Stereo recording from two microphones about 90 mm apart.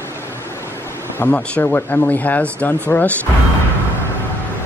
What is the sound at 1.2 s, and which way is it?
Speech, 15° left (ahead or behind).